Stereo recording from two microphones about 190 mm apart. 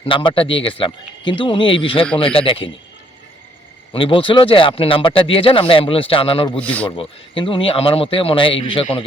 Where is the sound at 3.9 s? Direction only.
25° left (ahead or behind).